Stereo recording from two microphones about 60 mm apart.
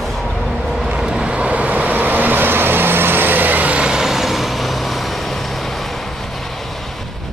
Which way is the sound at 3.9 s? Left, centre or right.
Centre.